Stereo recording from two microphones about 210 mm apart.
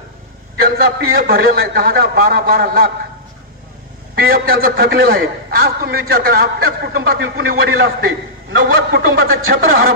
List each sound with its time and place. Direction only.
0.6 s a man's voice: 45° right (ahead or behind)
4.1 s a man's voice: 45° right (ahead or behind)